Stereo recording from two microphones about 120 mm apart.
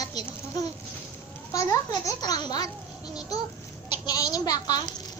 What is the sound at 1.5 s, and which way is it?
A child's voice, 25° left (ahead or behind).